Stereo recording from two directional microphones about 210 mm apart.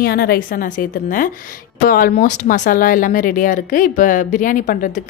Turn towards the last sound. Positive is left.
turn(degrees=40)  # may be behind; listen again after turning